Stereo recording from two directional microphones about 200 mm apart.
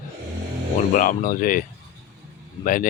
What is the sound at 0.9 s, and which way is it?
Speech, 40° left (ahead or behind).